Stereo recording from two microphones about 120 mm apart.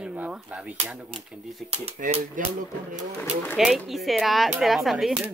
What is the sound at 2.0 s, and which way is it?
Speech, 90° right.